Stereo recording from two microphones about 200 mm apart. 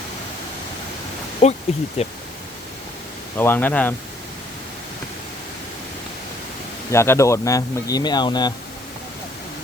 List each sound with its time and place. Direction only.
1.4 s speech: 35° left (ahead or behind)
3.3 s speech: 10° left (ahead or behind)
6.9 s speech: 15° left (ahead or behind)